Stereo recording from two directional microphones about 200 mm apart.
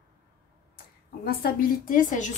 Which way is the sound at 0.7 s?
50° left (ahead or behind).